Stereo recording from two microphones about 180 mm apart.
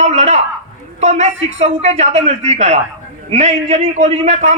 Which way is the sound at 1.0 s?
40° right (ahead or behind).